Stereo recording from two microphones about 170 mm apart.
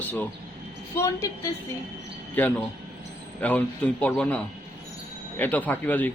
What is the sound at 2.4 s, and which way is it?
A man's voice, 10° left (ahead or behind).